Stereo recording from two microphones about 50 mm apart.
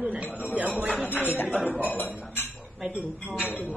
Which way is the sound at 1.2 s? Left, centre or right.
Left.